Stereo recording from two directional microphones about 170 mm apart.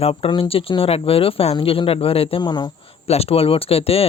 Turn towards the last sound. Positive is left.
turn(degrees=35)  # may be behind; listen again after turning